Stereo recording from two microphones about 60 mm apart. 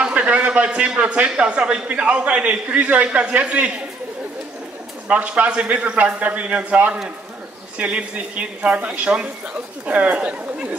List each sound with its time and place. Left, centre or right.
0.0 s a man's voice: right
5.0 s a man's voice: right